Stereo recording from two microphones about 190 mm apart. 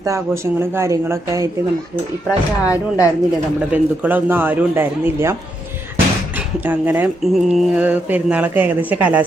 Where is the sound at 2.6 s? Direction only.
15° left (ahead or behind).